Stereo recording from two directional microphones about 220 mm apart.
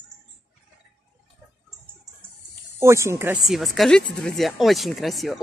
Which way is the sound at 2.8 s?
10° right (ahead or behind).